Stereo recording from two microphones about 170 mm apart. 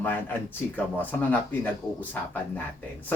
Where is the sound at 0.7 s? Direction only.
10° left (ahead or behind).